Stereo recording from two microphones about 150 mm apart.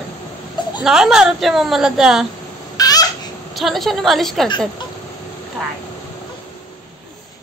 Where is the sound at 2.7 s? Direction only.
25° left (ahead or behind).